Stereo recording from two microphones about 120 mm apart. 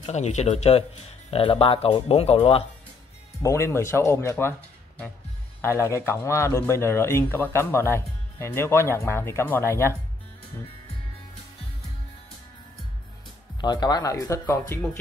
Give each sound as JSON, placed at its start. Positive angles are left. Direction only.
{"t": 0.0, "sound": "speech", "side_deg": 70}
{"t": 1.3, "sound": "speech", "side_deg": 50}
{"t": 3.4, "sound": "speech", "side_deg": 20}
{"t": 13.6, "sound": "speech", "side_deg": 35}
{"t": 14.4, "sound": "speech", "side_deg": 15}